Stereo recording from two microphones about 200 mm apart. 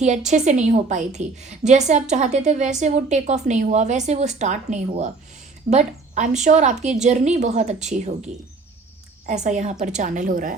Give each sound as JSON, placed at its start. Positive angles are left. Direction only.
{"t": 0.0, "sound": "a woman's voice", "side_deg": -35}
{"t": 9.2, "sound": "a woman's voice", "side_deg": -35}